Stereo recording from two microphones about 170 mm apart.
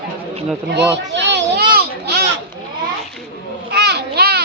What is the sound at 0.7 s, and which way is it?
Children playing, 85° right.